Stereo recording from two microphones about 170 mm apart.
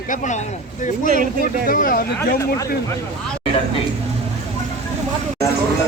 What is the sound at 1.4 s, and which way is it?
Speech, 55° left (ahead or behind).